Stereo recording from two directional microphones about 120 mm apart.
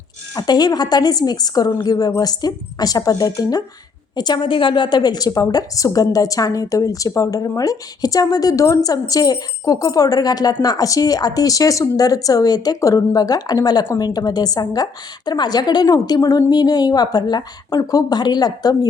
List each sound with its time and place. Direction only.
0.3 s a woman's voice: 35° left (ahead or behind)